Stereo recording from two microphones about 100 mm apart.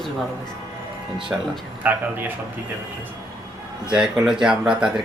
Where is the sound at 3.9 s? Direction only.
5° right (ahead or behind).